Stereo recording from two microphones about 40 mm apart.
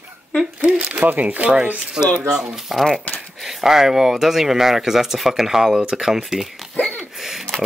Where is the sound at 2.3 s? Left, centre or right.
Centre.